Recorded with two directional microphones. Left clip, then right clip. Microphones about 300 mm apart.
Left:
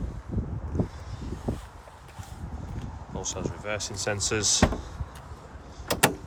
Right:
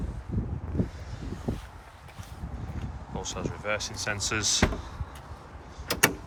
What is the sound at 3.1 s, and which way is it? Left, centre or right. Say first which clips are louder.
Speech: left 1 dB; centre.